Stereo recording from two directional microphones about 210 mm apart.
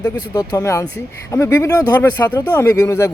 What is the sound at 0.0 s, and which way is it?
A man's voice, 15° left (ahead or behind).